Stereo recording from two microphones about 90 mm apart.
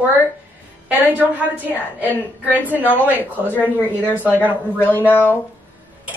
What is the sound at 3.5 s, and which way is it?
Speech, 20° left (ahead or behind).